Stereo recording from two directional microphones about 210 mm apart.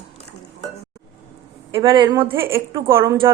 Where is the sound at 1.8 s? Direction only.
20° right (ahead or behind).